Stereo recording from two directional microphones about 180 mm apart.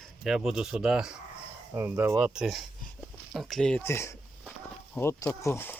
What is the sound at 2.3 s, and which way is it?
Speech, centre (ahead or behind).